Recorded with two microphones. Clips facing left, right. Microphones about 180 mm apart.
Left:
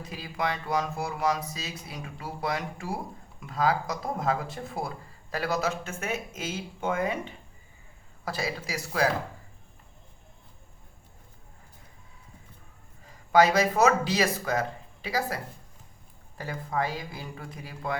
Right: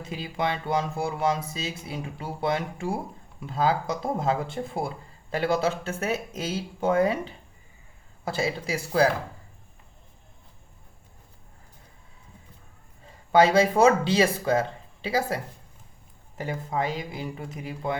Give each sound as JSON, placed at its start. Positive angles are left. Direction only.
{"t": 0.0, "sound": "speech", "side_deg": -25}
{"t": 13.1, "sound": "speech", "side_deg": -30}
{"t": 16.4, "sound": "speech", "side_deg": -20}